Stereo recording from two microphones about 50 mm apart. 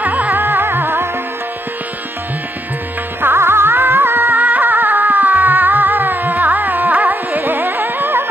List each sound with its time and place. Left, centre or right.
0.0 s music: right
3.2 s music: right